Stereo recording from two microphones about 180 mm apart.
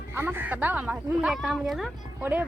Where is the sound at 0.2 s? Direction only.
10° right (ahead or behind).